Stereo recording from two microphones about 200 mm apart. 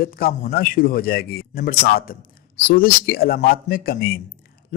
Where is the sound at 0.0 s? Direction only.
45° left (ahead or behind).